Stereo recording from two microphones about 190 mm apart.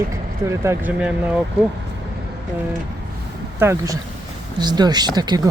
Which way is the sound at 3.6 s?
15° right (ahead or behind).